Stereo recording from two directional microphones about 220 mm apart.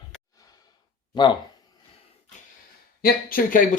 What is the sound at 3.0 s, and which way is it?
Speech, 40° left (ahead or behind).